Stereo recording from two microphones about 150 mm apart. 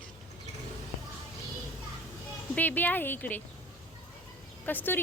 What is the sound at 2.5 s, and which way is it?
Speech, 10° left (ahead or behind).